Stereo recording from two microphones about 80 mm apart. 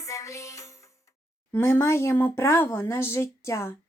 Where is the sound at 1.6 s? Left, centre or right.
Left.